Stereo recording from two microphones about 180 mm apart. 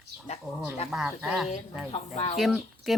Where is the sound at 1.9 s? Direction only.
35° left (ahead or behind).